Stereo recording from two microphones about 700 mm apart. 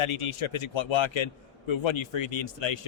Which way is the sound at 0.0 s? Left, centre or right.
Left.